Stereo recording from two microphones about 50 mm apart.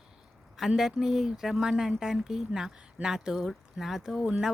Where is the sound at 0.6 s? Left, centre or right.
Centre.